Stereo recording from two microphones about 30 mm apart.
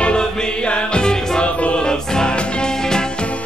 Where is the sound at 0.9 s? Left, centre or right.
Left.